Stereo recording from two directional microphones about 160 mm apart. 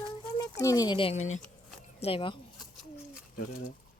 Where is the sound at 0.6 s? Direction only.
20° left (ahead or behind).